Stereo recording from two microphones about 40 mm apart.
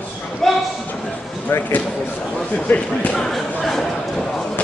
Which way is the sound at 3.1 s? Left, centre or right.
Centre.